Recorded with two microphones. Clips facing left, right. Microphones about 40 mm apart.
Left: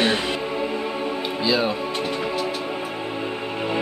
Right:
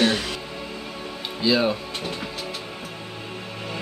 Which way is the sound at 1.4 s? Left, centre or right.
Centre.